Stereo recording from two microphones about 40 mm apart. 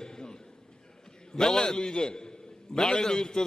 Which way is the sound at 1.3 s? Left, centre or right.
Centre.